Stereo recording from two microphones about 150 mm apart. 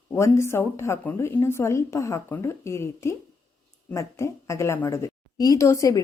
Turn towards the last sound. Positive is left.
turn(degrees=20)  # may be behind; listen again after turning